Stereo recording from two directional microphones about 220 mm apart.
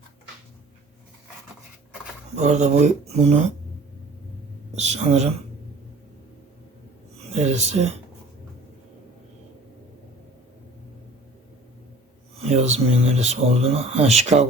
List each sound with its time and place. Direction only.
2.3 s speech: 30° right (ahead or behind)
4.7 s speech: 30° right (ahead or behind)
7.3 s speech: 30° right (ahead or behind)
12.4 s speech: 30° right (ahead or behind)